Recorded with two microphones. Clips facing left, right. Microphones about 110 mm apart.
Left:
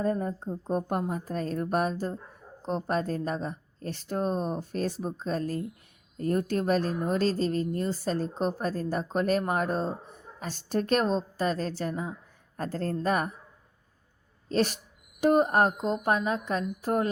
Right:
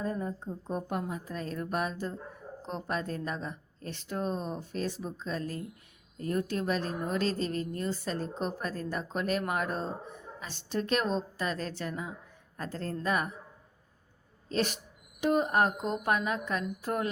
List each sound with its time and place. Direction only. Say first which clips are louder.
0.0 s a woman's voice: left 5 dB; 50° left (ahead or behind)
14.5 s a woman's voice: left 4 dB; 40° left (ahead or behind)